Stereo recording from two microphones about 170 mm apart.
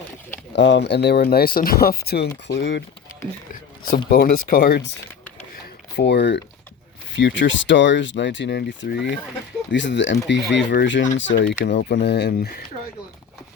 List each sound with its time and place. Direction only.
0.5 s speech: 90° left
3.5 s speech: 55° left (ahead or behind); by 4.9 s 80° left
6.0 s speech: 85° left; by 12.6 s 65° left (ahead or behind)